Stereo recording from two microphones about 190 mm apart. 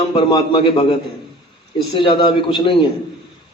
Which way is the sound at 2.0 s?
25° left (ahead or behind).